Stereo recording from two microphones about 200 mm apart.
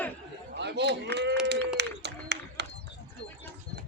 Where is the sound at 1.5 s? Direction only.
60° right (ahead or behind).